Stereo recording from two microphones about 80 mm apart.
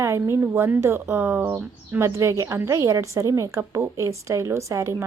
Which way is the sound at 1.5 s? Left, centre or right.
Right.